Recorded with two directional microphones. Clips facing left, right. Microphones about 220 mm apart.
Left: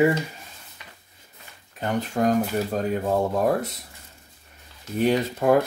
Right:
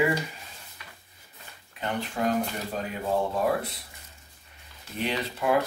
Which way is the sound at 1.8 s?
45° left (ahead or behind).